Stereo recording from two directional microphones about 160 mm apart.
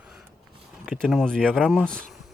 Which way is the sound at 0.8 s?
Centre (ahead or behind).